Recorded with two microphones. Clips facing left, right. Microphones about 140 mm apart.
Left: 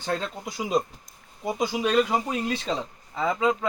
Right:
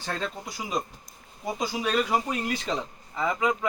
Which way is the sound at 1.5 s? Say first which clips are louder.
Left 4 dB; 20° left (ahead or behind).